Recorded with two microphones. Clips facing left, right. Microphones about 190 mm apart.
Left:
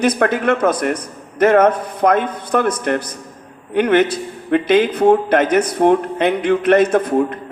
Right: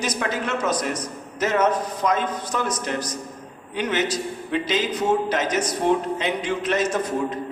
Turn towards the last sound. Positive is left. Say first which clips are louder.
# left 8 dB
turn(degrees=55)  # may be behind; listen again after turning